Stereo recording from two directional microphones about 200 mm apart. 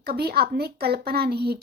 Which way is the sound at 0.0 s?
50° right (ahead or behind).